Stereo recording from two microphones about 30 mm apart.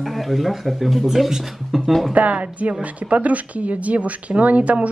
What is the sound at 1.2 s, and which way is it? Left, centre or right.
Speech, centre.